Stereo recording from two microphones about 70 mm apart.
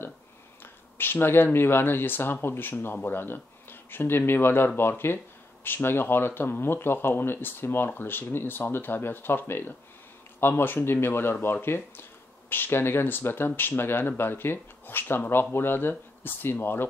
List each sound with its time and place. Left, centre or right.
0.9 s speech: left